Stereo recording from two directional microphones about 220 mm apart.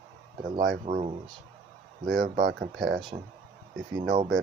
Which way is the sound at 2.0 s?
45° right (ahead or behind).